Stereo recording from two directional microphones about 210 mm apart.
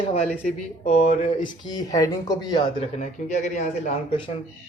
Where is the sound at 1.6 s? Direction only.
15° left (ahead or behind).